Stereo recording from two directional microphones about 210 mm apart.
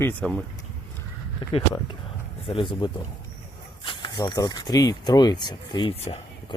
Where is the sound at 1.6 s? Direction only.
25° left (ahead or behind).